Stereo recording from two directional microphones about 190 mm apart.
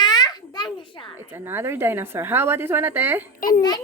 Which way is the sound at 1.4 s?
10° right (ahead or behind).